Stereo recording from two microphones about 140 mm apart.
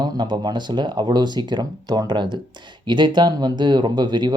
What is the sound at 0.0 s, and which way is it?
Speech, 30° right (ahead or behind).